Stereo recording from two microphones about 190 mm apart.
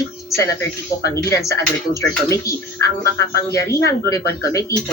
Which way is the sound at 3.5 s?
15° left (ahead or behind).